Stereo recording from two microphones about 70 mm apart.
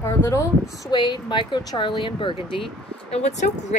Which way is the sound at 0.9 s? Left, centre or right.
Left.